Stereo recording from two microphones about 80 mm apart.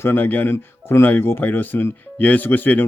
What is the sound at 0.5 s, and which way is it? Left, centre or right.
Speech, left.